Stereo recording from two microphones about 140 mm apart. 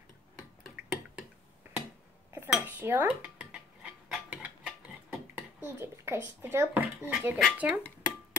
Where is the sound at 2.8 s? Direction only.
15° right (ahead or behind).